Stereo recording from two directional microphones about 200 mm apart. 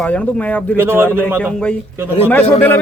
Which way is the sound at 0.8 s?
10° right (ahead or behind).